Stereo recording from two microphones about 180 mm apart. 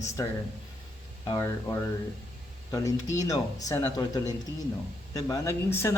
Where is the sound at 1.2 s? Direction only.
20° left (ahead or behind).